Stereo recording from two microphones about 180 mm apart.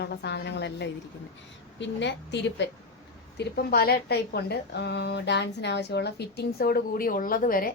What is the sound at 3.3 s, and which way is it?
A woman's voice, 60° left (ahead or behind).